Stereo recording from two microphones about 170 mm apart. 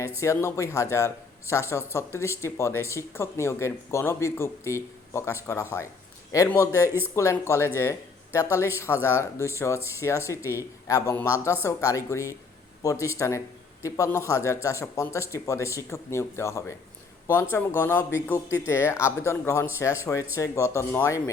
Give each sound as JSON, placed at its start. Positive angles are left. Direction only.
{"t": 0.2, "sound": "a man's voice", "side_deg": 15}